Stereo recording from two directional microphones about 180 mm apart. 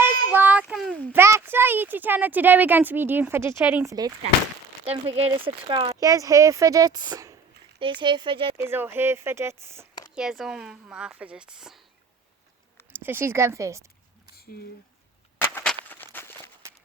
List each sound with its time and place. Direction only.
0.0 s child singing: 10° right (ahead or behind)
1.2 s speech: 15° right (ahead or behind)
4.9 s speech: 35° right (ahead or behind)
8.6 s speech: 10° right (ahead or behind)
10.2 s speech: 5° right (ahead or behind)
12.9 s speech: 10° right (ahead or behind)
15.4 s a sound: 10° left (ahead or behind)
16.1 s walk: 15° left (ahead or behind)